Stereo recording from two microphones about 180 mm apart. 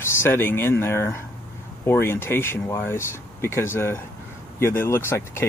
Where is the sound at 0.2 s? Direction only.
10° left (ahead or behind).